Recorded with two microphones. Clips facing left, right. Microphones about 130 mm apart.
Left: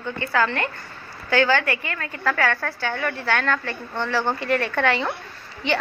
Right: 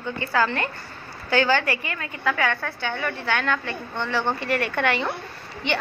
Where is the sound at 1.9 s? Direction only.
15° right (ahead or behind).